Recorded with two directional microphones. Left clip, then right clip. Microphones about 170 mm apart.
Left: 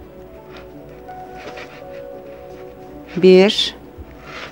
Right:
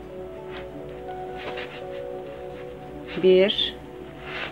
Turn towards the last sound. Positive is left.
turn(degrees=55)  # may be behind; listen again after turning